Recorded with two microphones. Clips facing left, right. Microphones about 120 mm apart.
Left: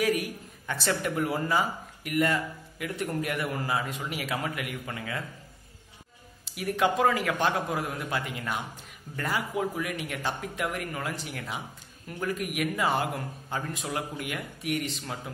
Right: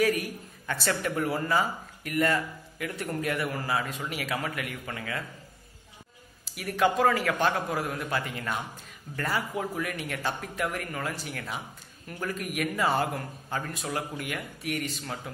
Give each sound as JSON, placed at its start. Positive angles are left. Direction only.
{"t": 0.0, "sound": "a man's voice", "side_deg": 15}
{"t": 6.4, "sound": "a man's voice", "side_deg": 20}